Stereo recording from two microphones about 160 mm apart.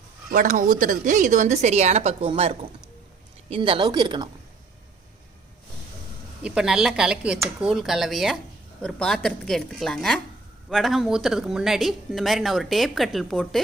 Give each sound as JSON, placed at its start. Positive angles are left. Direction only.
{"t": 0.3, "sound": "a woman's voice", "side_deg": -55}
{"t": 6.4, "sound": "speech", "side_deg": -5}